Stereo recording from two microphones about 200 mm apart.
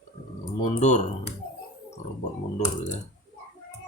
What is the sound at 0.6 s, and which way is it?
Speech, 35° left (ahead or behind).